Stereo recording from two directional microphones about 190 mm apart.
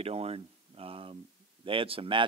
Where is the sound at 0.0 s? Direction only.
30° right (ahead or behind).